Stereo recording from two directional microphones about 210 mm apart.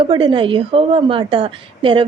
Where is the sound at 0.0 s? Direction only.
25° right (ahead or behind).